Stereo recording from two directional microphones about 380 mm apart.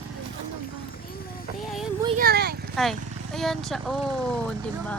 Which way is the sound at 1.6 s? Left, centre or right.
Centre.